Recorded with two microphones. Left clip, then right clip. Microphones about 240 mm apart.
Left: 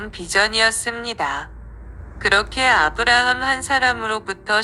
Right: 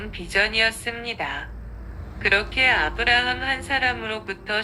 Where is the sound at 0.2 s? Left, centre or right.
Left.